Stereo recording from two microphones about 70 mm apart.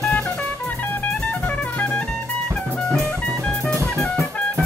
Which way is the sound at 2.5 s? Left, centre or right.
Centre.